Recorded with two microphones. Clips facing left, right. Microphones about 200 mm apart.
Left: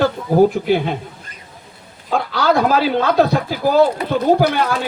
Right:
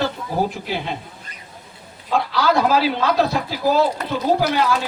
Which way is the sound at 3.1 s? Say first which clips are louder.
Left 4 dB; 55° left (ahead or behind).